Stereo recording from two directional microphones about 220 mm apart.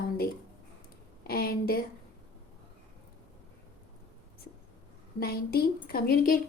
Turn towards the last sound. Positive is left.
turn(degrees=40)  # may be behind; listen again after turning